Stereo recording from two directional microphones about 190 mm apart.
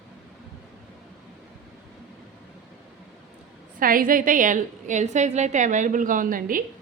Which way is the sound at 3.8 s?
50° right (ahead or behind).